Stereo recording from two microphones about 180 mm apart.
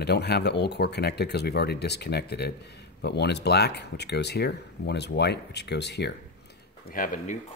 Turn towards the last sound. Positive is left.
turn(degrees=50)  # may be behind; listen again after turning